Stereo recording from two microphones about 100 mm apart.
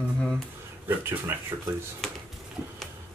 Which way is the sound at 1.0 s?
25° right (ahead or behind).